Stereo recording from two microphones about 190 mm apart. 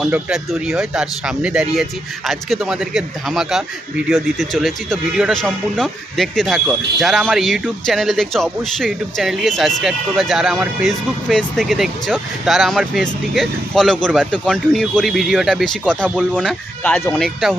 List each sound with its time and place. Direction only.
0.0 s speech: 5° right (ahead or behind)